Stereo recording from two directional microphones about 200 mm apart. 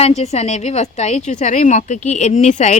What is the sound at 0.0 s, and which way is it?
A woman's voice, 35° left (ahead or behind).